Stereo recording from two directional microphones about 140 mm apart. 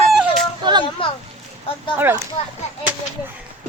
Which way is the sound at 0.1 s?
Centre (ahead or behind).